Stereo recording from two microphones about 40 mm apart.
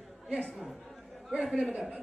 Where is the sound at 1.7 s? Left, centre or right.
Right.